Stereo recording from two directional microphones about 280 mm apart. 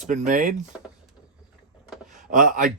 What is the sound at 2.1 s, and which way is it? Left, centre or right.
Speech, right.